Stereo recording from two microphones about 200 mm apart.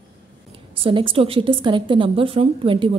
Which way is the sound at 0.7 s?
25° right (ahead or behind).